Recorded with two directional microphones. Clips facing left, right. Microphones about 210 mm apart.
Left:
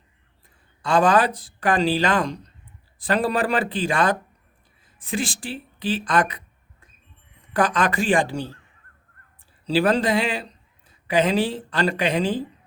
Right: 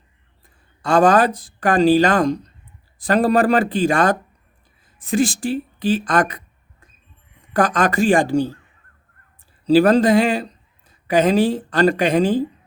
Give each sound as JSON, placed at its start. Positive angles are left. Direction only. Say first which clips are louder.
{"t": 0.8, "sound": "speech", "louder": "right 4 dB", "side_deg": -45}
{"t": 7.5, "sound": "speech", "louder": "right 4 dB", "side_deg": -45}
{"t": 9.6, "sound": "speech", "louder": "right 7 dB", "side_deg": -45}